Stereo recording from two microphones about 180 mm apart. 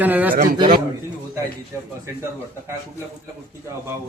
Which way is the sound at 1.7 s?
15° right (ahead or behind).